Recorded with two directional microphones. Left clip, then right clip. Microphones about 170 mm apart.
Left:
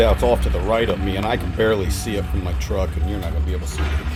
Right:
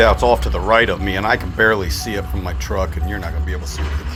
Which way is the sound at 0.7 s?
15° left (ahead or behind).